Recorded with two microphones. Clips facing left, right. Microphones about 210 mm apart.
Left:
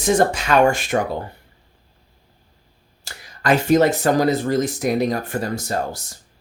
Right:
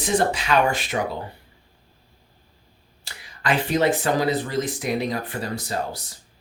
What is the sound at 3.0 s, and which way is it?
Speech, 45° left (ahead or behind).